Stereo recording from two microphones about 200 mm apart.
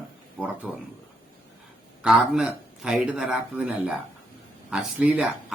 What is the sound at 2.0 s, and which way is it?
Speech, 5° right (ahead or behind).